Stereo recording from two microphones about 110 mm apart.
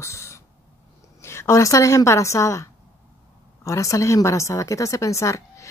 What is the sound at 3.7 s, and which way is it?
A woman's voice, 25° left (ahead or behind).